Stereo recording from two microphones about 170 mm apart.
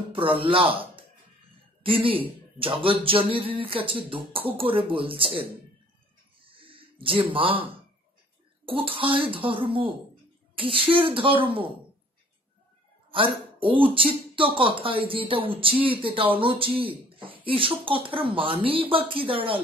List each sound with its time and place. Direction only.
0.1 s a man's voice: 30° right (ahead or behind)
6.4 s a sound: 30° right (ahead or behind)
8.6 s speech: 30° right (ahead or behind)
13.1 s speech: 30° right (ahead or behind)